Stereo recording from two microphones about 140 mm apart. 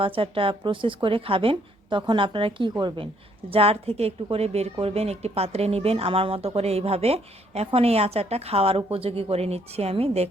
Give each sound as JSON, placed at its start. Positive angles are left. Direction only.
{"t": 0.0, "sound": "a woman's voice", "side_deg": -40}
{"t": 3.5, "sound": "speech", "side_deg": -45}